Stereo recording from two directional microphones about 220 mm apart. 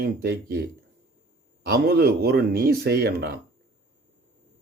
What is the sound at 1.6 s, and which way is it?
Speech, 45° right (ahead or behind).